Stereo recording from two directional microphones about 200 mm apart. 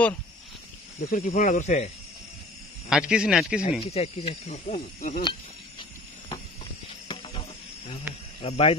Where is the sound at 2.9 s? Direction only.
5° right (ahead or behind).